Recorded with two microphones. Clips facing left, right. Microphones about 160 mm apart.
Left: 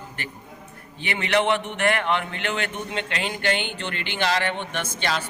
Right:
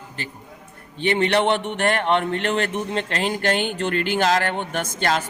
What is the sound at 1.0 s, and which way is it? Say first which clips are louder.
Speech: right 4 dB; 35° right (ahead or behind).